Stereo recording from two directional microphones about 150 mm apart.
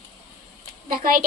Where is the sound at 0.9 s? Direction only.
70° right (ahead or behind).